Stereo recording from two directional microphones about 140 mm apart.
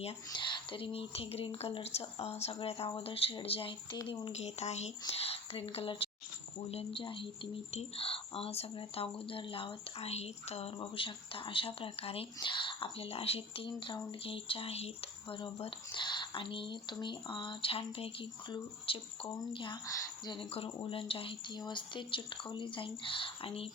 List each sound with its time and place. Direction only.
0.0 s speech: 35° left (ahead or behind)